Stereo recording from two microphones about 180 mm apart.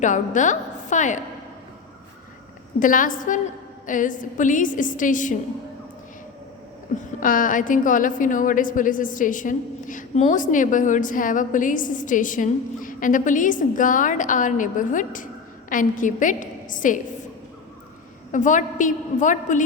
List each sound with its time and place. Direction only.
0.0 s a woman's voice: 45° left (ahead or behind)
2.8 s a woman's voice: 50° left (ahead or behind)
7.2 s a woman's voice: 50° left (ahead or behind)
18.3 s a woman's voice: 45° left (ahead or behind)